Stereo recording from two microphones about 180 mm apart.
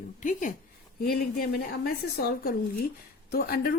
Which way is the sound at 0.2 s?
45° left (ahead or behind).